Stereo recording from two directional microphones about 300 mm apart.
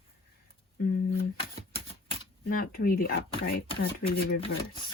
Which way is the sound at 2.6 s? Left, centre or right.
Left.